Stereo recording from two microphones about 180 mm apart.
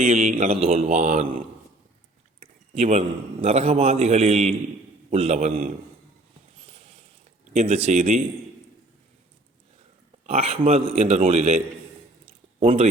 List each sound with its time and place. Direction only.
0.0 s a man's voice: 45° right (ahead or behind)
2.4 s a sound: 35° right (ahead or behind)
3.4 s a man's voice: 35° right (ahead or behind)
7.5 s a man's voice: 35° right (ahead or behind)
10.2 s a man's voice: 35° right (ahead or behind)
12.6 s a man's voice: 35° right (ahead or behind)